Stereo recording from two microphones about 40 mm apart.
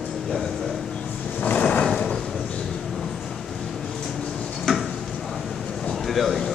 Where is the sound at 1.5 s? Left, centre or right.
Left.